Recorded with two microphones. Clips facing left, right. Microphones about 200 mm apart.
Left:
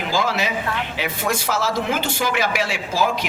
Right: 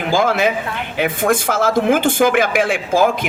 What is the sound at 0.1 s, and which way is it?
A man's voice, 50° right (ahead or behind).